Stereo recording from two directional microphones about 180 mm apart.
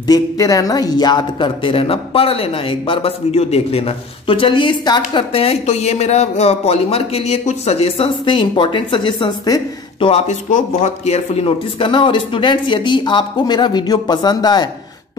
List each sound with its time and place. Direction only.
0.0 s speech: 20° left (ahead or behind)